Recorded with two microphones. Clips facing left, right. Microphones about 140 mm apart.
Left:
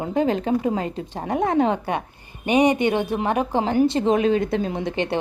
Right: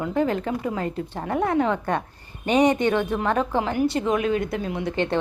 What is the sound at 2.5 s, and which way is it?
A woman's voice, 10° left (ahead or behind).